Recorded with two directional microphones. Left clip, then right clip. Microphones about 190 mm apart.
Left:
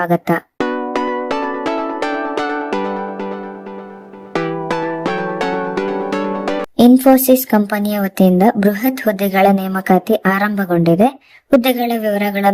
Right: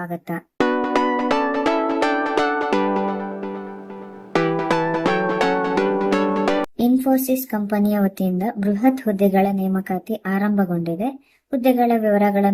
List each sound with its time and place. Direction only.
0.0 s speech: 45° left (ahead or behind)
0.6 s music: centre (ahead or behind)
4.3 s music: centre (ahead or behind)
6.7 s speech: 40° left (ahead or behind)